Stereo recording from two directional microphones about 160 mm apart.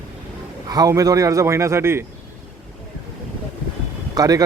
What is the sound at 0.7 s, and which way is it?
A man's voice, 25° right (ahead or behind).